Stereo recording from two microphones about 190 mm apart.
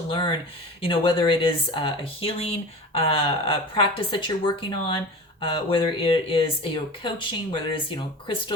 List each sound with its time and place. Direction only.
0.1 s speech: 25° left (ahead or behind)